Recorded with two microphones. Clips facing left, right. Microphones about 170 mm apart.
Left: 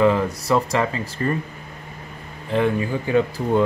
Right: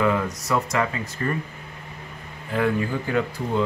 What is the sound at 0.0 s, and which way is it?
Speech, 30° left (ahead or behind).